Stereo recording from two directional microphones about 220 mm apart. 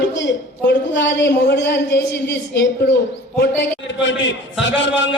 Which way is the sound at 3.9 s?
55° left (ahead or behind).